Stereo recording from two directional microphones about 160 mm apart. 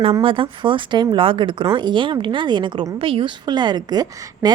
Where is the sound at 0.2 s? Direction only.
35° right (ahead or behind).